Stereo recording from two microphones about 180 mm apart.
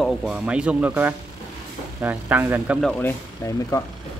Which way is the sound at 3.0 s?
15° left (ahead or behind).